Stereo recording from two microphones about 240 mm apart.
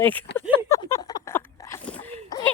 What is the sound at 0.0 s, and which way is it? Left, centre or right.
Speech, centre.